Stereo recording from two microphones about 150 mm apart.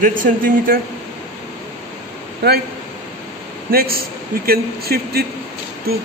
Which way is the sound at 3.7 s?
85° right.